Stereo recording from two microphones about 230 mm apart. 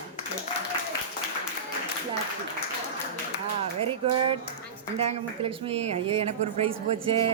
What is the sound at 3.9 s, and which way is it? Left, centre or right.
A woman's voice, right.